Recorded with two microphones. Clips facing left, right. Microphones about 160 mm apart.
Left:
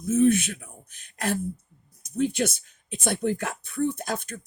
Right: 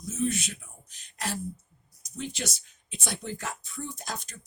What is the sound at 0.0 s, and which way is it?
Speech, 55° left (ahead or behind).